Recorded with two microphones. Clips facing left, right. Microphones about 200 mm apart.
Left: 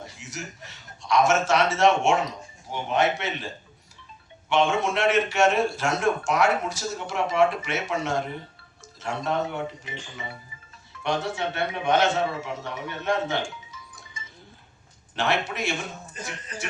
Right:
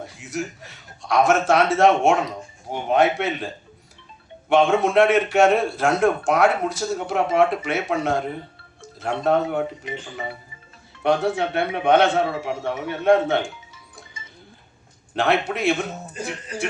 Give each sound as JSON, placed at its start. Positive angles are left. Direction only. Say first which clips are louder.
{"t": 0.0, "sound": "a man's voice", "louder": "right 9 dB", "side_deg": -55}
{"t": 11.0, "sound": "a man's voice", "louder": "right 7 dB", "side_deg": -55}
{"t": 15.1, "sound": "a man's voice", "louder": "right 5 dB", "side_deg": -55}